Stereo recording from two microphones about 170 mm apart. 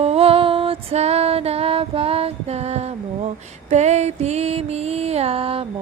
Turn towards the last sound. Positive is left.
turn(degrees=-35)  # may be behind; listen again after turning